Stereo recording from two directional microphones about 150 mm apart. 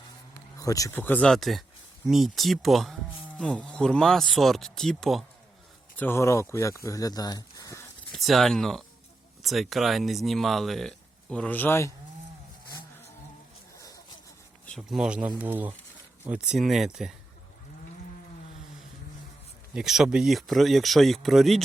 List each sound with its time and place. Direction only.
0.5 s speech: 25° left (ahead or behind); by 5.2 s centre (ahead or behind)
6.0 s speech: 15° left (ahead or behind)
8.1 s speech: centre (ahead or behind); by 11.9 s 20° left (ahead or behind)
13.7 s a sound: 20° left (ahead or behind)
14.7 s speech: centre (ahead or behind)
19.7 s speech: 5° right (ahead or behind)